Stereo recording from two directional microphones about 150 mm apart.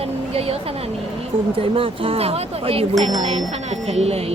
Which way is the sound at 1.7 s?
40° right (ahead or behind).